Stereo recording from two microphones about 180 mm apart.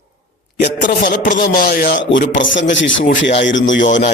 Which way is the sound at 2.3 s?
90° left.